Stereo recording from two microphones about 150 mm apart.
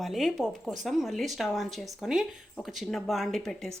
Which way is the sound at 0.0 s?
Centre (ahead or behind).